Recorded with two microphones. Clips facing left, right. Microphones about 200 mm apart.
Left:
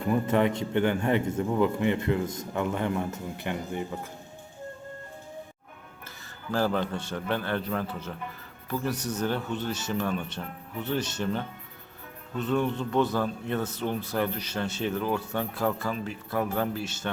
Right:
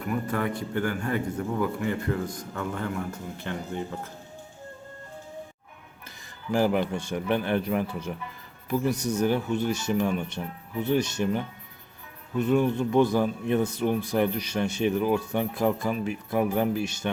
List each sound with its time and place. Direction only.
0.0 s a man's voice: 25° left (ahead or behind)
6.5 s speech: 15° right (ahead or behind)